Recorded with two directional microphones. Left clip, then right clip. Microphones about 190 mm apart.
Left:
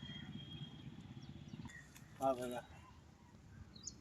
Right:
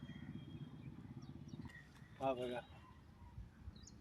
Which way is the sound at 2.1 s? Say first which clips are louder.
Left 2 dB; 10° right (ahead or behind).